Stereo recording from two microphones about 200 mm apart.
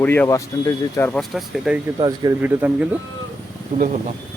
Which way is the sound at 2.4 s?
10° right (ahead or behind).